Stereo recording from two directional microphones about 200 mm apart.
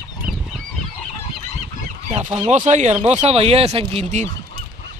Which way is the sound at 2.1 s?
35° right (ahead or behind).